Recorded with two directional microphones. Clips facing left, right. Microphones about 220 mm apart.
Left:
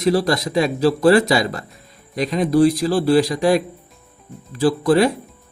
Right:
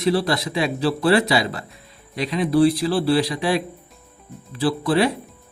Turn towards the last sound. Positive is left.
turn(degrees=45)  # may be behind; listen again after turning